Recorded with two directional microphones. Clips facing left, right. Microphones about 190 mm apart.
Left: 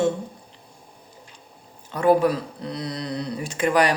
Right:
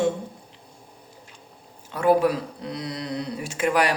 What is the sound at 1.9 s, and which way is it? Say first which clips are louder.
Speech: left 1 dB; 5° right (ahead or behind).